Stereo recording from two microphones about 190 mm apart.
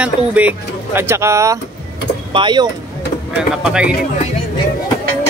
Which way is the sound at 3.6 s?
5° right (ahead or behind).